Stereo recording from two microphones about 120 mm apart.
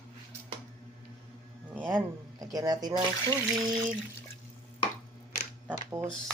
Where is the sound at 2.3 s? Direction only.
30° right (ahead or behind).